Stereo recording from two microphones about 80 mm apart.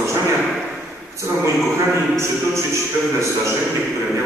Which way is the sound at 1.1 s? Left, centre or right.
Right.